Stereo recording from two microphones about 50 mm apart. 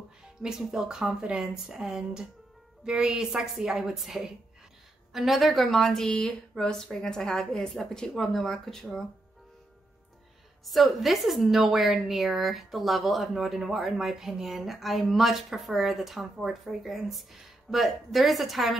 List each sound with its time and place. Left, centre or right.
0.4 s a woman's voice: centre
6.0 s a sound: left
6.5 s speech: centre
10.6 s a woman's voice: centre